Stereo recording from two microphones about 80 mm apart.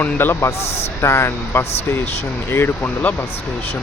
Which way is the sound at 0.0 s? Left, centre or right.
Left.